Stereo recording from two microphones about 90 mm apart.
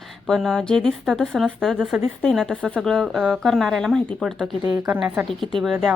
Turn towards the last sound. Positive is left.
turn(degrees=0)  # may be behind; listen again after turning